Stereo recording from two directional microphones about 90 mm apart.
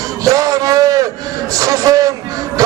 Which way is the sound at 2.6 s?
40° right (ahead or behind).